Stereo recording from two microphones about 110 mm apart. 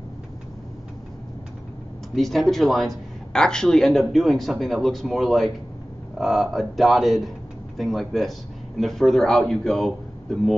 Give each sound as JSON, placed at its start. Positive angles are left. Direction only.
{"t": 2.1, "sound": "a man's voice", "side_deg": 0}